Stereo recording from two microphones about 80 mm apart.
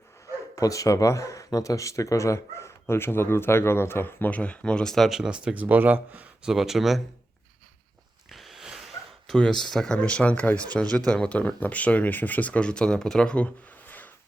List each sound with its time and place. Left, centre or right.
0.5 s speech: left; by 5.3 s centre
5.3 s speech: centre
6.5 s speech: centre
8.3 s a sound: centre
9.2 s speech: centre